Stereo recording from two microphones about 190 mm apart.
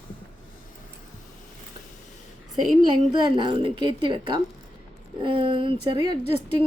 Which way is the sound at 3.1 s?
25° right (ahead or behind).